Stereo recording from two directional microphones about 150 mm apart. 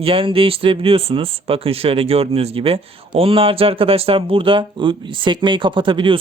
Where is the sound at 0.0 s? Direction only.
35° right (ahead or behind).